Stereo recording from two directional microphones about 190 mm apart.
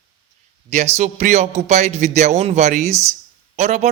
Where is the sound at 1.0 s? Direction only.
35° right (ahead or behind).